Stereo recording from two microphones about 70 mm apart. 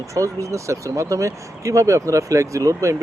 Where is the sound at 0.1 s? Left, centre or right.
Right.